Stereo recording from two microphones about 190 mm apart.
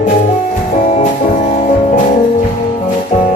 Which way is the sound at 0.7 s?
40° left (ahead or behind).